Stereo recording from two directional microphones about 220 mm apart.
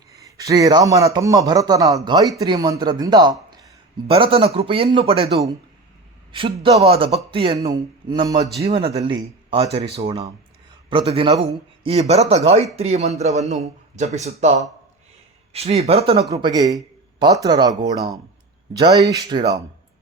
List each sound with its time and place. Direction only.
0.1 s a man's voice: 15° right (ahead or behind)
6.3 s speech: 25° right (ahead or behind)
16.3 s speech: 15° right (ahead or behind)